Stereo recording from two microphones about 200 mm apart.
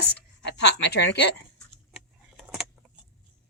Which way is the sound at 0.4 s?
60° left (ahead or behind).